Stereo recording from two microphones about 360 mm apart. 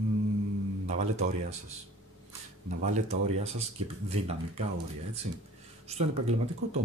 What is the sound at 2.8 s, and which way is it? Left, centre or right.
Speech, centre.